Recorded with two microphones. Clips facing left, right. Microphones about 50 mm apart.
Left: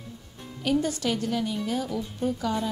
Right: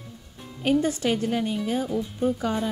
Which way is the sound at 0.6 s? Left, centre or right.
Right.